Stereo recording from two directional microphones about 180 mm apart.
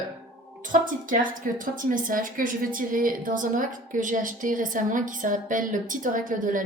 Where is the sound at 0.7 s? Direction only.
50° right (ahead or behind).